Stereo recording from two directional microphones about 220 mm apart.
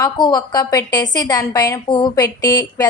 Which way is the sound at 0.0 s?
20° left (ahead or behind).